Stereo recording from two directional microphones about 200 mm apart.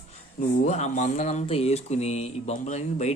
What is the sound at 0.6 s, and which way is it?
Speech, 35° left (ahead or behind).